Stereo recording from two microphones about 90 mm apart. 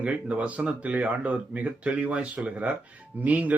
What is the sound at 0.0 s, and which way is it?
Speech, 15° right (ahead or behind).